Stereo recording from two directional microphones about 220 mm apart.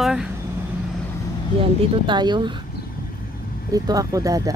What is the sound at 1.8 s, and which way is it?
Speech, 20° right (ahead or behind).